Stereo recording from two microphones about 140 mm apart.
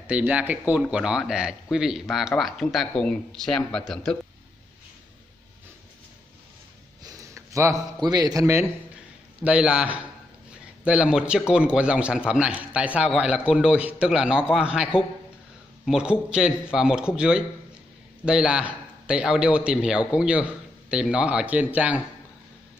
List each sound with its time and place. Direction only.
0.0 s speech: 10° right (ahead or behind)
7.0 s a man's voice: 25° right (ahead or behind)
9.4 s a man's voice: 10° right (ahead or behind)